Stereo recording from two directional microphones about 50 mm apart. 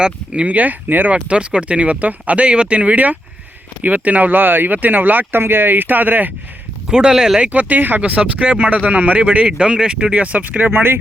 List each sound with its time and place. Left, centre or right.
0.0 s speech: right
0.5 s speech: right
1.1 s speech: right
6.8 s speech: centre
7.5 s speech: right
8.0 s speech: right